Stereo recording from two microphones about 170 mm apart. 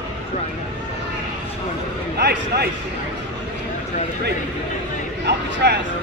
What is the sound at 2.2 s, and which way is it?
Speech, 70° right (ahead or behind).